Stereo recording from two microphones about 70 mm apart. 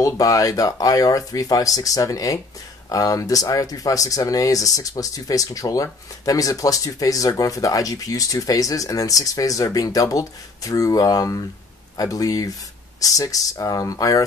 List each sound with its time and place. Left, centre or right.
0.0 s speech: left